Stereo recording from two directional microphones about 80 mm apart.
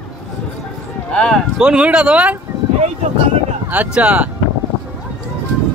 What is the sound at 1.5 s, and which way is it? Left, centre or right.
Speech, centre.